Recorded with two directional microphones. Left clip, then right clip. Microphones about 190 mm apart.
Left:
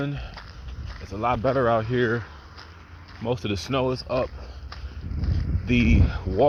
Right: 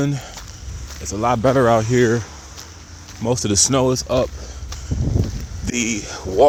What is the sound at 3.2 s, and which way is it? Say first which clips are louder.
Speech: right 9 dB; 35° right (ahead or behind).